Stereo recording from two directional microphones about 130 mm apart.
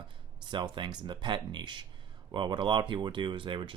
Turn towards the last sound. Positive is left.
turn(degrees=-40)  # may be behind; listen again after turning